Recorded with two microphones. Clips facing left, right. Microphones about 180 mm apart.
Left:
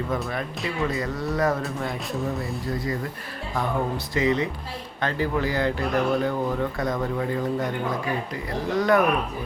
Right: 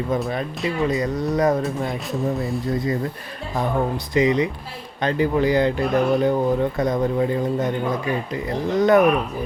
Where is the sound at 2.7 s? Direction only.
20° right (ahead or behind).